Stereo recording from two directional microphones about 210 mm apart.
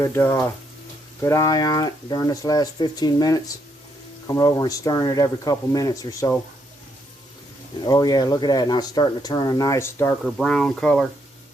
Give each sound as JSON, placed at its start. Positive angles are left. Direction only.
{"t": 0.0, "sound": "speech", "side_deg": 10}
{"t": 7.9, "sound": "speech", "side_deg": 20}